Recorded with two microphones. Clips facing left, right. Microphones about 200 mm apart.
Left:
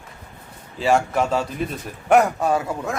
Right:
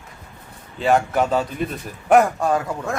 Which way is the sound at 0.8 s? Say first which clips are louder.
Right 1 dB; centre (ahead or behind).